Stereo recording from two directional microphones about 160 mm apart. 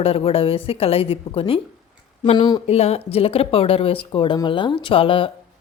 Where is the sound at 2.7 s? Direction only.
40° left (ahead or behind).